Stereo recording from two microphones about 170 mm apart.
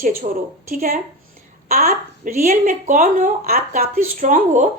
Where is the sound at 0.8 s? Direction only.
60° right (ahead or behind).